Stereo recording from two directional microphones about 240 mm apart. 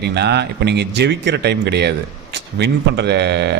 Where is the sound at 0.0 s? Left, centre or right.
Right.